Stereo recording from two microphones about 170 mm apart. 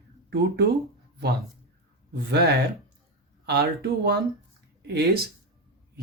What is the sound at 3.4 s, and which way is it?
Speech, 70° right (ahead or behind).